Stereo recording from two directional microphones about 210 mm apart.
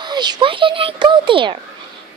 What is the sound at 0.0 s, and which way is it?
A woman's voice, 20° right (ahead or behind).